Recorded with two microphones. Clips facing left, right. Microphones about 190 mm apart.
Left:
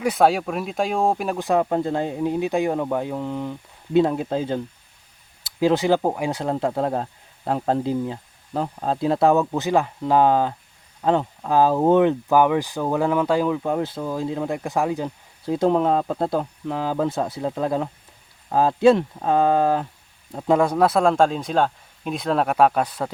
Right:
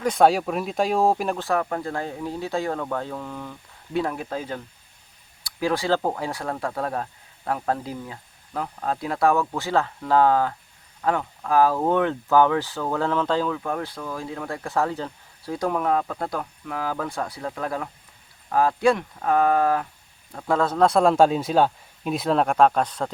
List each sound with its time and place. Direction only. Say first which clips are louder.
0.0 s speech: even; 5° left (ahead or behind)
1.4 s speech: left 5 dB; 20° left (ahead or behind)